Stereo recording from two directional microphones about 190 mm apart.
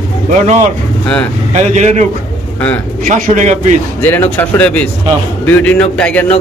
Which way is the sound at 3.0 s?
40° right (ahead or behind).